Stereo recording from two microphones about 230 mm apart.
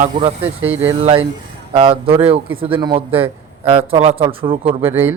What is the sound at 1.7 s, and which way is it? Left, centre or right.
Speech, right.